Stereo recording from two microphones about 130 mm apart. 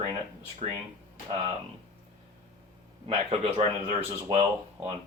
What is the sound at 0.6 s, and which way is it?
Speech, 55° right (ahead or behind).